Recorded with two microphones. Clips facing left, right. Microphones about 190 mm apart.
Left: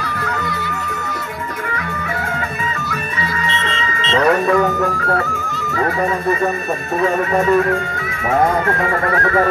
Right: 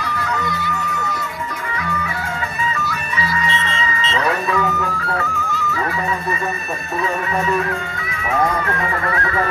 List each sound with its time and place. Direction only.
4.1 s speech: 50° left (ahead or behind)
7.0 s speech: 45° left (ahead or behind)